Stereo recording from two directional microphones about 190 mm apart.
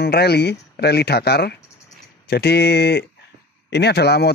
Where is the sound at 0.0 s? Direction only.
60° left (ahead or behind).